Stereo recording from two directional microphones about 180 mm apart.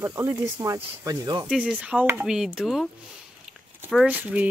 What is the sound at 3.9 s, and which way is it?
Speech, 5° right (ahead or behind).